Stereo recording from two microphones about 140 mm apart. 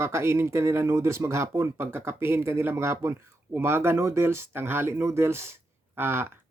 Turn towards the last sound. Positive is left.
turn(degrees=-15)  # may be behind; listen again after turning